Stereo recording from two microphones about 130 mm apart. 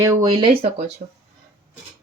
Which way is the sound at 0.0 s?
30° right (ahead or behind).